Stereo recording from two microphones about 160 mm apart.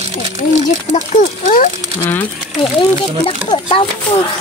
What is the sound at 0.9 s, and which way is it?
Speech, 50° left (ahead or behind).